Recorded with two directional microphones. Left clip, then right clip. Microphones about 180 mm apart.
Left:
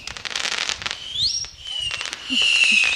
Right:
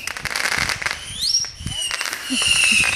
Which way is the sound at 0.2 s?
25° left (ahead or behind).